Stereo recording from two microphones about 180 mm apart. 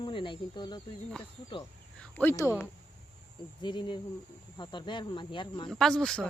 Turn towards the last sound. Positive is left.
turn(degrees=5)  # may be behind; listen again after turning